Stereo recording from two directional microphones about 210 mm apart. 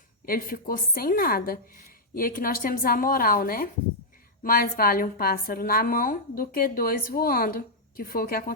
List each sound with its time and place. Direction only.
0.3 s a woman's voice: 45° left (ahead or behind)